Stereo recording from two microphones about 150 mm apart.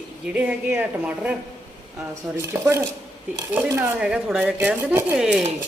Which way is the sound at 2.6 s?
15° right (ahead or behind).